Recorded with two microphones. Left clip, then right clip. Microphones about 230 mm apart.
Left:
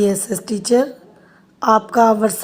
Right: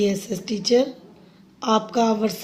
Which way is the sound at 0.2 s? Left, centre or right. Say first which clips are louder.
Left 5 dB; left.